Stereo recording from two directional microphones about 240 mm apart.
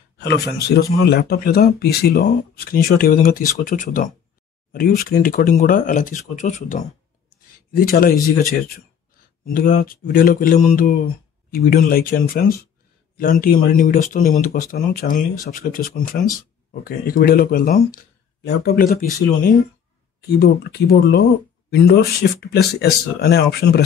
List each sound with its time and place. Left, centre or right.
0.2 s speech: left
9.5 s speech: left
20.2 s speech: left